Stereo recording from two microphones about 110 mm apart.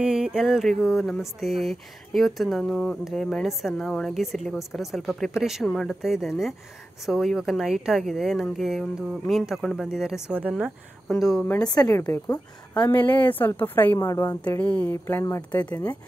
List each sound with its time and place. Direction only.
0.0 s speech: 10° right (ahead or behind)
11.1 s speech: 5° left (ahead or behind)
11.6 s a woman's voice: 35° left (ahead or behind)
12.3 s a woman's voice: 15° left (ahead or behind)
13.9 s speech: 30° left (ahead or behind)
14.5 s a woman's voice: 15° left (ahead or behind)